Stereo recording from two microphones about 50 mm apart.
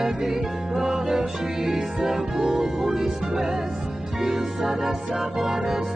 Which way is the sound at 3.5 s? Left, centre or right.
Right.